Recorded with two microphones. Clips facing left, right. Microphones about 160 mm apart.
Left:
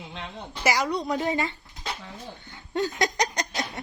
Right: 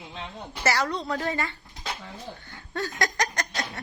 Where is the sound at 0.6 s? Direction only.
10° left (ahead or behind).